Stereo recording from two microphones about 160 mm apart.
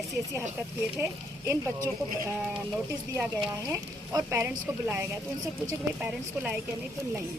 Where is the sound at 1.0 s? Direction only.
15° right (ahead or behind).